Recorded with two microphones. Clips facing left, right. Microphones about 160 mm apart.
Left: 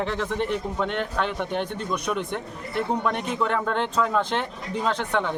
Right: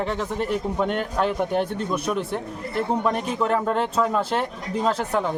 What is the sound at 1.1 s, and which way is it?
Speech, 40° right (ahead or behind).